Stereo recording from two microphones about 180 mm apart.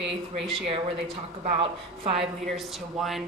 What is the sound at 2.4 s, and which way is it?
Speech, centre (ahead or behind).